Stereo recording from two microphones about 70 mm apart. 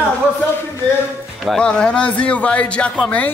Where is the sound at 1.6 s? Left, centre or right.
Centre.